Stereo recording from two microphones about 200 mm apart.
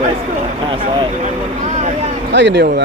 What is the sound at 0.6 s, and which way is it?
Speech, 25° right (ahead or behind).